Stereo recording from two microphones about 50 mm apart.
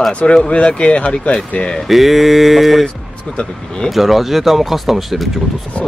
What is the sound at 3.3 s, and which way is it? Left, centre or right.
Speech, centre.